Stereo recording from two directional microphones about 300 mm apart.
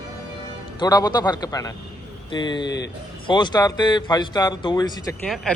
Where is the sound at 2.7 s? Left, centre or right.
Left.